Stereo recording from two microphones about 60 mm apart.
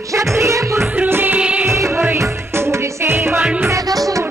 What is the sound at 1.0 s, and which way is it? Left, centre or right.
Music, right.